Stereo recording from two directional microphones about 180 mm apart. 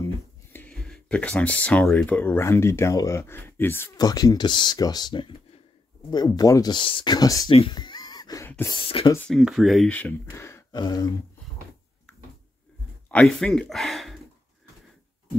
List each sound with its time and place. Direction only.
0.0 s speech: 10° left (ahead or behind)
7.5 s a sound: 25° left (ahead or behind)
8.5 s speech: 15° left (ahead or behind)
8.7 s speech: 30° left (ahead or behind)
9.3 s speech: centre (ahead or behind); by 11.1 s 20° left (ahead or behind)
13.1 s speech: 5° left (ahead or behind)